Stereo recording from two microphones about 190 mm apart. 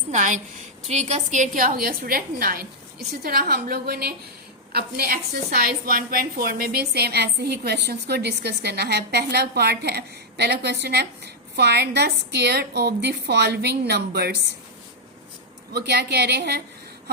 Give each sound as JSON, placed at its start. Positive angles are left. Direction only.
{"t": 0.1, "sound": "a woman's voice", "side_deg": -40}
{"t": 15.7, "sound": "a woman's voice", "side_deg": -60}